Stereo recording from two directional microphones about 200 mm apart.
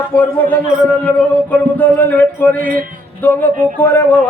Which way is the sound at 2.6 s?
45° right (ahead or behind).